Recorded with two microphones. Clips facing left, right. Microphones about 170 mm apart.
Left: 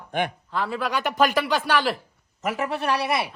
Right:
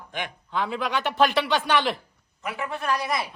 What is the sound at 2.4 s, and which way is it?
Speech, 40° left (ahead or behind).